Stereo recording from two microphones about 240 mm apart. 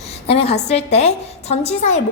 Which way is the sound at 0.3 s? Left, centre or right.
Left.